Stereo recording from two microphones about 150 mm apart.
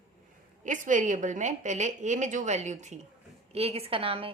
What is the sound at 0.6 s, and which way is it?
A woman's voice, 60° right (ahead or behind).